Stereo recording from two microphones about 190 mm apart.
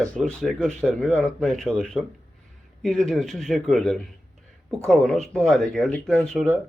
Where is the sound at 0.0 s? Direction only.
5° left (ahead or behind).